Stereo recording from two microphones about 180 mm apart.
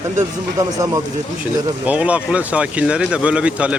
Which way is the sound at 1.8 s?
5° right (ahead or behind).